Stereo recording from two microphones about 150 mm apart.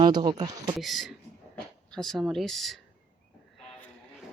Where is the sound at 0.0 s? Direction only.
30° right (ahead or behind).